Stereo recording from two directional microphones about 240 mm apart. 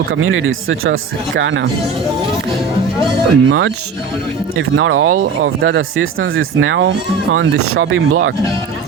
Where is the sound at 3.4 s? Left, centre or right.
Right.